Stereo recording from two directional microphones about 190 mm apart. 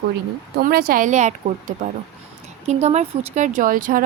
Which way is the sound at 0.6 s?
50° right (ahead or behind).